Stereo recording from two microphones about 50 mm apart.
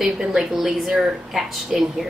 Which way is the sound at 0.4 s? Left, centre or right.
Centre.